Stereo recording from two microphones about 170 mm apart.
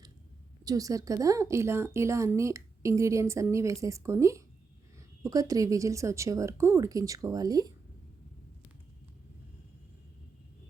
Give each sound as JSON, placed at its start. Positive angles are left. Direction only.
{"t": 0.6, "sound": "a woman's voice", "side_deg": -20}